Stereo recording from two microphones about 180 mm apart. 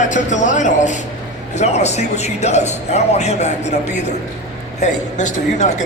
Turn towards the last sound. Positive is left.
turn(degrees=40)  # may be behind; listen again after turning